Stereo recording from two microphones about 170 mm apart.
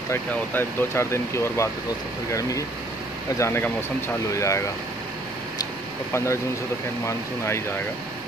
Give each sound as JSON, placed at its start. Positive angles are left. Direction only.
{"t": 0.1, "sound": "speech", "side_deg": 15}
{"t": 3.3, "sound": "speech", "side_deg": 15}
{"t": 6.1, "sound": "speech", "side_deg": 15}